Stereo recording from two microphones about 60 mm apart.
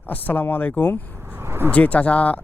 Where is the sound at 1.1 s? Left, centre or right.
Right.